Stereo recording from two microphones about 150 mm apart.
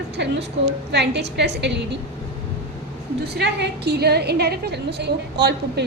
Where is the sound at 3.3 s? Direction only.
90° right.